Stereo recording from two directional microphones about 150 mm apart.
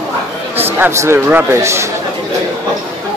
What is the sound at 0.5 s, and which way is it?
Speech, 15° right (ahead or behind).